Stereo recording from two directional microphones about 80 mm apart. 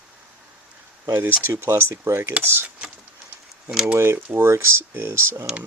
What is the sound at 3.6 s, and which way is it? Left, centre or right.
Speech, centre.